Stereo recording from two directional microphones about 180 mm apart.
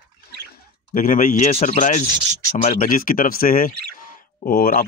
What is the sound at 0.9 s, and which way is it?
Speech, 45° left (ahead or behind).